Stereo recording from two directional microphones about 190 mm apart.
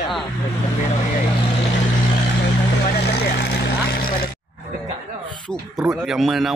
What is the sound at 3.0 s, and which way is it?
Vehicle, 60° left (ahead or behind).